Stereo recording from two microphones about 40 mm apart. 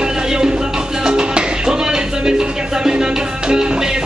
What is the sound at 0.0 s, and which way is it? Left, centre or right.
Music, centre.